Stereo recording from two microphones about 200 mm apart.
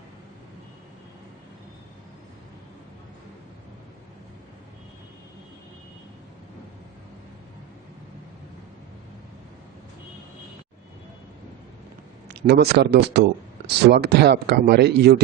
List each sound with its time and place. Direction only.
12.3 s a man's voice: 55° right (ahead or behind)